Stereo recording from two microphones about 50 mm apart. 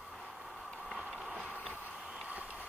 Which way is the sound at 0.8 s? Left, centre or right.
Centre.